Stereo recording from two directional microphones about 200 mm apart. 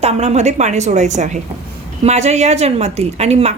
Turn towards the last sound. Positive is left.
turn(degrees=-35)  # may be behind; listen again after turning